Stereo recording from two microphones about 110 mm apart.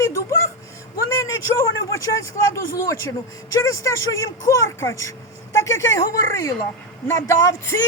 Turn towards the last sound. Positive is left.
turn(degrees=25)  # may be behind; listen again after turning